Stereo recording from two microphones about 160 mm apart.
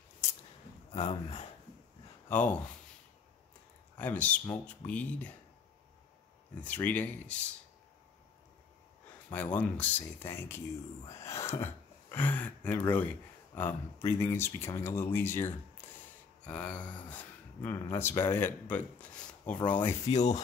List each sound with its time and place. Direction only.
0.9 s speech: 35° left (ahead or behind)
2.2 s speech: 10° left (ahead or behind)
3.9 s speech: 10° left (ahead or behind)
6.6 s speech: 10° left (ahead or behind)
9.3 s speech: 10° left (ahead or behind)
20.1 s rub: 45° left (ahead or behind)